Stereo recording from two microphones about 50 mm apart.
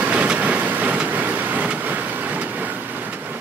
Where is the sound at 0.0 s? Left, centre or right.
Right.